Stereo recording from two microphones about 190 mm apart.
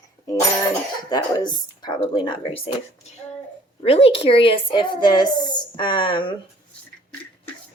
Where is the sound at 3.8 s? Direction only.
30° left (ahead or behind).